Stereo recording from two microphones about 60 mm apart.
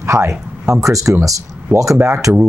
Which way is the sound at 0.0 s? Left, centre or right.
Right.